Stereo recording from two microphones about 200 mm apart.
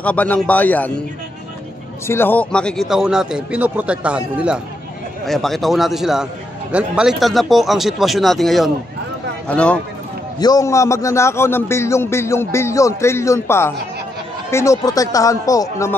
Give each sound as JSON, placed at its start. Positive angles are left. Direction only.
{"t": 0.0, "sound": "a man's voice", "side_deg": 5}
{"t": 2.0, "sound": "speech", "side_deg": 10}
{"t": 10.4, "sound": "a man's voice", "side_deg": 15}